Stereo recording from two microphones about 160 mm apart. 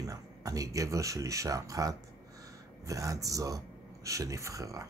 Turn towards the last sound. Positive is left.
turn(degrees=-20)  # may be behind; listen again after turning